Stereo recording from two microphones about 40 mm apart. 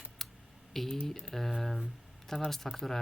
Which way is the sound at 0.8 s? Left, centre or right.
Centre.